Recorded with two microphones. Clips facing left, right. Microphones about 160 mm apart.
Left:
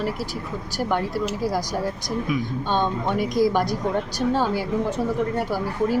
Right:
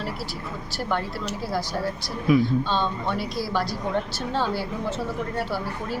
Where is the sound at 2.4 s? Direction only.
15° left (ahead or behind).